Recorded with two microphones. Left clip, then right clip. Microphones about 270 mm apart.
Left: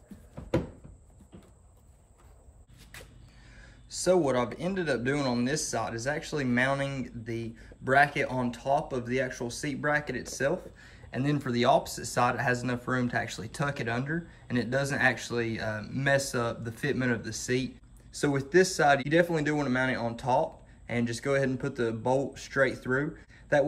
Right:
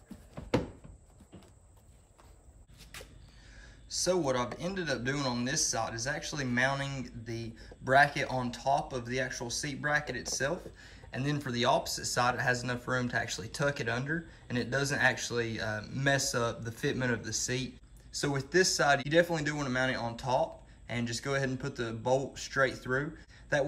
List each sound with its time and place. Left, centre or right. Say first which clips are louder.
3.6 s speech: left 4 dB; centre